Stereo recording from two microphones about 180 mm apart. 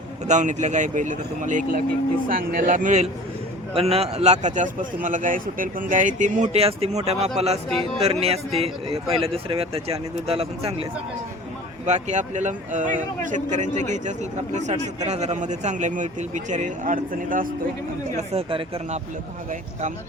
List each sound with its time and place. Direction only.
0.3 s speech: 40° right (ahead or behind)
11.9 s speech: 40° right (ahead or behind)
18.2 s speech: 35° right (ahead or behind)